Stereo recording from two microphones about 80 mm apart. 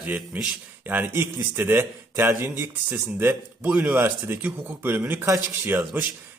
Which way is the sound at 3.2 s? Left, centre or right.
Right.